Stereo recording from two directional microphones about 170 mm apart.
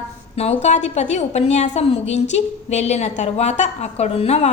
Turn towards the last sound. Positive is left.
turn(degrees=40)  # may be behind; listen again after turning